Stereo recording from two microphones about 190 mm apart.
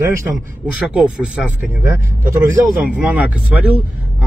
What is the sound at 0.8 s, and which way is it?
Speech, 5° right (ahead or behind).